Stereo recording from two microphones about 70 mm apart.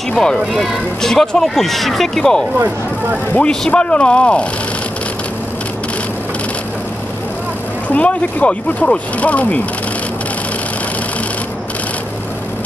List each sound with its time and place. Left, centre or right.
0.1 s speech: centre
7.9 s speech: centre